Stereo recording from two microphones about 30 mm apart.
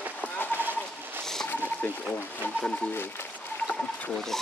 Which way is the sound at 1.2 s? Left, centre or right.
Centre.